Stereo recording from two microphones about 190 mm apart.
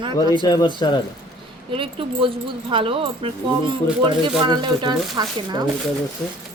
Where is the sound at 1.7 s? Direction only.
30° right (ahead or behind).